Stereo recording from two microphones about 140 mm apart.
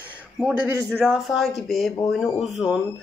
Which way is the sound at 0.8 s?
5° right (ahead or behind).